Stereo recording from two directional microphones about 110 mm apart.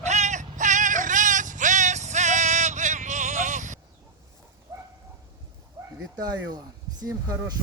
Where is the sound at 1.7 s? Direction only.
90° right.